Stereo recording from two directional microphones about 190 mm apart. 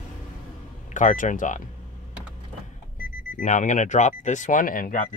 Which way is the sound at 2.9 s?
45° left (ahead or behind).